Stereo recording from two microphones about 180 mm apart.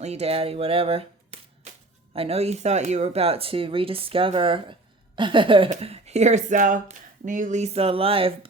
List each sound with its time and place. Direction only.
0.0 s speech: 35° right (ahead or behind)